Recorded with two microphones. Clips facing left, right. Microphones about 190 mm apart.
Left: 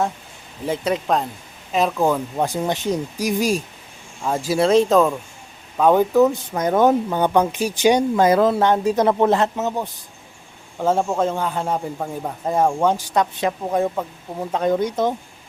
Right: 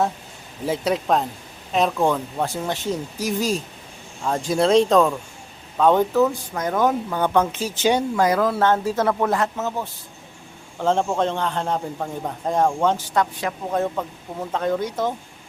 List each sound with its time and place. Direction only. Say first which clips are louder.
0.6 s speech: even; centre (ahead or behind)
2.4 s a man's voice: left 3 dB; 15° left (ahead or behind)
6.2 s speech: left 4 dB; 20° left (ahead or behind)
10.8 s a man's voice: left 1 dB; 5° left (ahead or behind)